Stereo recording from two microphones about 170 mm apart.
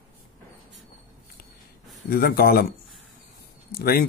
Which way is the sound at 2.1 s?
65° left (ahead or behind).